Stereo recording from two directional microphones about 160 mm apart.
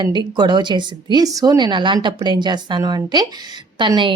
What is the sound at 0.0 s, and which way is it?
A woman's voice, 30° right (ahead or behind).